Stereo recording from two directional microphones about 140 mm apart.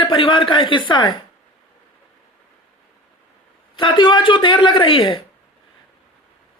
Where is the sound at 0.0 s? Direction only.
35° left (ahead or behind).